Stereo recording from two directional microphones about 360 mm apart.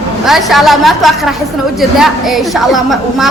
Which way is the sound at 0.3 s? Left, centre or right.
Centre.